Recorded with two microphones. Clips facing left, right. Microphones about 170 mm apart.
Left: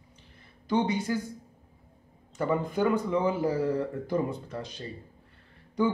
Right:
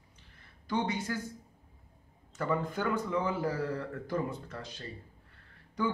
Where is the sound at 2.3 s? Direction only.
15° left (ahead or behind).